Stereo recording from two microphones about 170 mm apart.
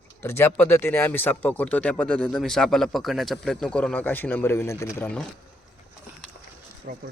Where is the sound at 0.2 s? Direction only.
15° left (ahead or behind).